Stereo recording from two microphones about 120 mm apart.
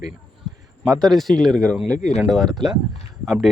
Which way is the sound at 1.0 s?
Centre (ahead or behind).